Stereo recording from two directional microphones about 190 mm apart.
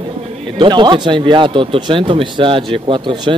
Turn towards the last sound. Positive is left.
turn(degrees=-25)  # may be behind; listen again after turning